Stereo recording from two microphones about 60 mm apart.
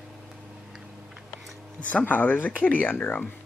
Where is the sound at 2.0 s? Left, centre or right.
Left.